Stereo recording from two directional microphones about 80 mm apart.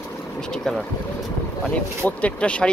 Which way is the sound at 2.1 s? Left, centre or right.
Centre.